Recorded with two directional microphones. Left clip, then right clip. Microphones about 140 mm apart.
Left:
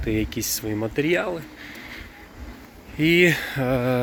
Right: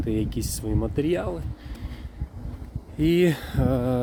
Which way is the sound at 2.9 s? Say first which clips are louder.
Left 4 dB; 35° right (ahead or behind).